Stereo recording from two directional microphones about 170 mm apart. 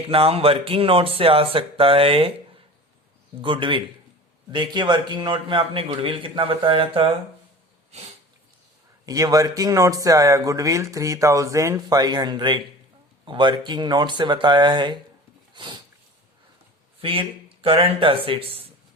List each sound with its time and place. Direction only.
0.1 s a man's voice: 35° right (ahead or behind)
3.4 s a man's voice: 30° right (ahead or behind)
9.0 s speech: 20° right (ahead or behind)
15.5 s a sound: 30° right (ahead or behind)
17.0 s a man's voice: 30° right (ahead or behind)